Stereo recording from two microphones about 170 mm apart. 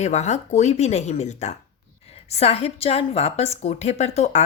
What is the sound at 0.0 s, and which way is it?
A woman's voice, 40° left (ahead or behind).